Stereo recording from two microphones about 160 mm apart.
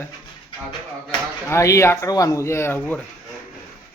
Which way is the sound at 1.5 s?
20° left (ahead or behind).